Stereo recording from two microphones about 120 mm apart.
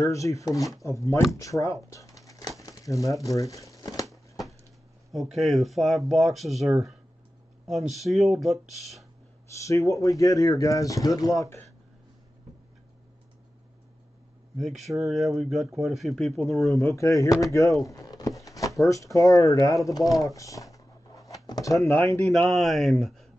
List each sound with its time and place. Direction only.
0.0 s speech: 25° left (ahead or behind)
1.9 s a sound: 25° left (ahead or behind)
2.6 s speech: 30° left (ahead or behind)
4.1 s a sound: centre (ahead or behind)
5.1 s speech: centre (ahead or behind)
9.6 s speech: 25° left (ahead or behind)
14.6 s speech: centre (ahead or behind)
16.8 s speech: 25° left (ahead or behind)
22.0 s speech: 15° left (ahead or behind)
22.5 s speech: centre (ahead or behind)